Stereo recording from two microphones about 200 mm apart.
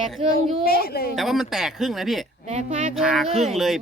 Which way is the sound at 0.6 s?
50° left (ahead or behind).